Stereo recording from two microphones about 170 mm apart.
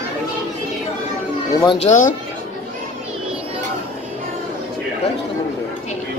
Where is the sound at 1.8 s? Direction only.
45° left (ahead or behind).